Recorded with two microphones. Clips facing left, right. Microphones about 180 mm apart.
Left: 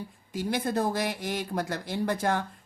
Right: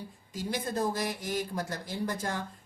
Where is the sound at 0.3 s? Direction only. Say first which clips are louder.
Left 4 dB; 65° left (ahead or behind).